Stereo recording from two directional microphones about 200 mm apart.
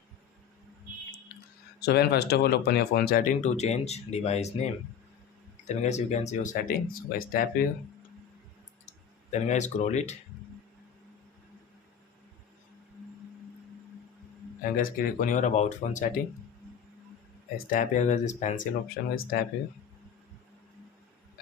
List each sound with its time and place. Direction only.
1.8 s speech: 55° left (ahead or behind)
3.4 s speech: 35° left (ahead or behind)
8.9 s speech: 35° left (ahead or behind)
14.6 s speech: 45° left (ahead or behind)
17.7 s speech: 40° left (ahead or behind)